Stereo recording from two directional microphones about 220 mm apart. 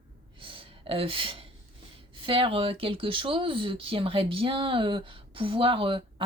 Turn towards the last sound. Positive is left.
turn(degrees=-25)  # may be behind; listen again after turning